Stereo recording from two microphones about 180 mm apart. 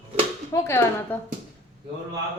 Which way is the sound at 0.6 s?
15° left (ahead or behind).